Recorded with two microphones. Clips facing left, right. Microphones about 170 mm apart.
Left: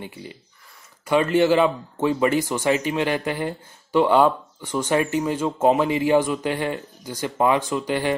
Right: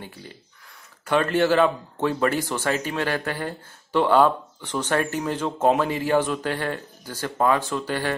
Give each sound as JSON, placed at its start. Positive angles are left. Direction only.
{"t": 0.0, "sound": "speech", "side_deg": 10}